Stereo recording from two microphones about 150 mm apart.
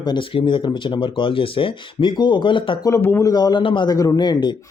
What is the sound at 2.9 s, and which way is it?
A man's voice, 15° left (ahead or behind).